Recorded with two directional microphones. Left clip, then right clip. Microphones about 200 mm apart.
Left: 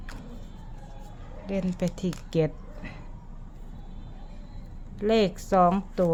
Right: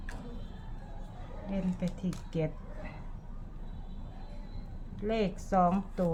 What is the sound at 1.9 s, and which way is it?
Speech, 50° left (ahead or behind).